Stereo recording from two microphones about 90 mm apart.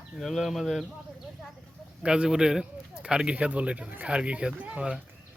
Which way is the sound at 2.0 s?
10° right (ahead or behind).